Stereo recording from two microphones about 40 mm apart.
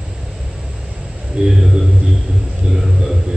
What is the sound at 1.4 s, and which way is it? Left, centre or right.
Speech, right.